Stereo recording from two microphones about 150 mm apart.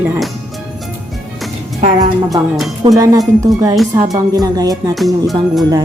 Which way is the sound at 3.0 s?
20° right (ahead or behind).